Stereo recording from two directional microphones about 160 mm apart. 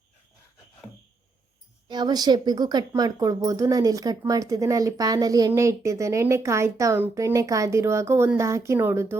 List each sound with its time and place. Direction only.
1.9 s speech: 25° right (ahead or behind)